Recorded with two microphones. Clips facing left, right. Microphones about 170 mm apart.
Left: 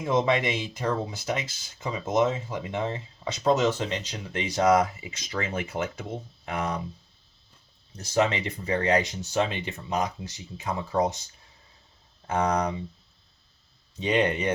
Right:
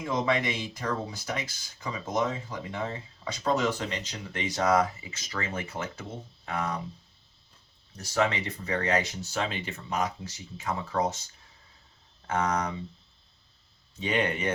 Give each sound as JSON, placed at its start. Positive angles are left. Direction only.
{"t": 0.0, "sound": "speech", "side_deg": 25}
{"t": 7.9, "sound": "speech", "side_deg": 20}
{"t": 12.3, "sound": "speech", "side_deg": 15}
{"t": 14.0, "sound": "speech", "side_deg": 20}